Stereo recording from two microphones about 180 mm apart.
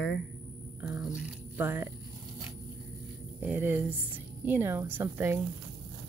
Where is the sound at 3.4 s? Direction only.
10° right (ahead or behind).